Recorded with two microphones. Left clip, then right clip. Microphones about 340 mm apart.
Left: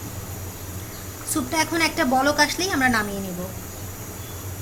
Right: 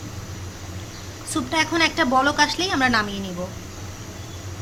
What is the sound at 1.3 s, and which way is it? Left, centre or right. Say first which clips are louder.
A woman's voice: right 1 dB; centre.